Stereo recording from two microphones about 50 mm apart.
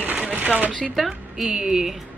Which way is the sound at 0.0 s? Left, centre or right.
Right.